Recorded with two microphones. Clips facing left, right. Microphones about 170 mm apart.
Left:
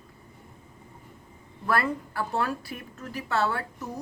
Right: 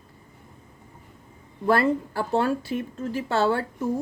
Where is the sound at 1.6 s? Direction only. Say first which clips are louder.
Right 6 dB; 25° right (ahead or behind).